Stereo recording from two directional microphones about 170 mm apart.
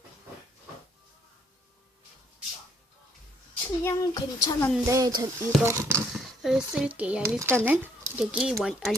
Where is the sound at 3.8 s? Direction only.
20° left (ahead or behind).